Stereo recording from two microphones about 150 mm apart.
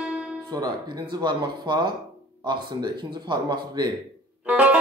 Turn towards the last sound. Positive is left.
turn(degrees=-10)  # may be behind; listen again after turning